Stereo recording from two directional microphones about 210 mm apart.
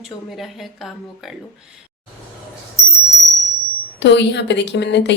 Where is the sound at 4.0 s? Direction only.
55° left (ahead or behind).